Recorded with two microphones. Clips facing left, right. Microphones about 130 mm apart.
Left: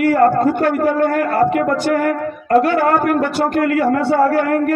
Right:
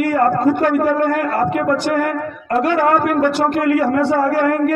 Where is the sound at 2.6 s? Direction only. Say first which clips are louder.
Even; 45° left (ahead or behind).